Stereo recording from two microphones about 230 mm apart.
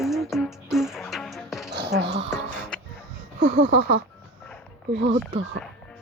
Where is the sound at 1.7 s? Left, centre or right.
Right.